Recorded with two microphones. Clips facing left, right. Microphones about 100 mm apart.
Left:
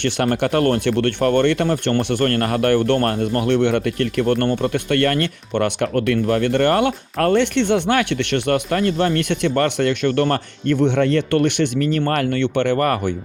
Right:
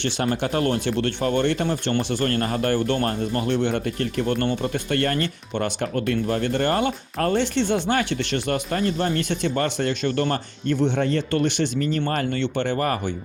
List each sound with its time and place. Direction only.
0.0 s speech: 60° left (ahead or behind)